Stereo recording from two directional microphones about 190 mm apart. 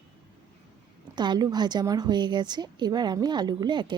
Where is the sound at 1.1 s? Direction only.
20° right (ahead or behind).